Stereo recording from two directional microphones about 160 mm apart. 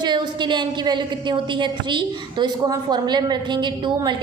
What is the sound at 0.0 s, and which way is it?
A woman's voice, 30° right (ahead or behind).